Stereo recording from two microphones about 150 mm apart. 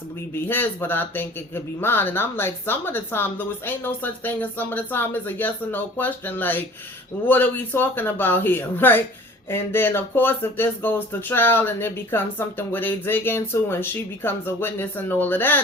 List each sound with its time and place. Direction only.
0.4 s speech: 15° left (ahead or behind)